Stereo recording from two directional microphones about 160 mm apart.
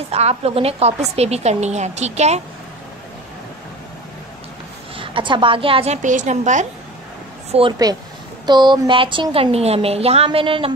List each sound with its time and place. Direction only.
0.1 s a woman's voice: 40° right (ahead or behind)
4.9 s a woman's voice: 30° right (ahead or behind)
6.0 s a woman's voice: 50° right (ahead or behind)
8.5 s a woman's voice: 25° right (ahead or behind)